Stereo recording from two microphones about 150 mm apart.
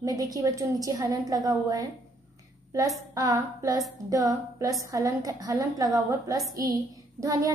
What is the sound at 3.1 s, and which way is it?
Female singing, 25° right (ahead or behind).